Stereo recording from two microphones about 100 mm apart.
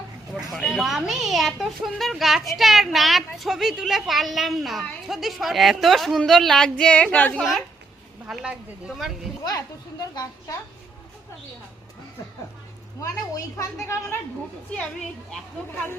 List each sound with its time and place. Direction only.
0.5 s a woman's voice: centre (ahead or behind)
7.3 s a woman's voice: 5° right (ahead or behind)
10.0 s a woman's voice: 40° left (ahead or behind)
13.0 s a woman's voice: 30° left (ahead or behind)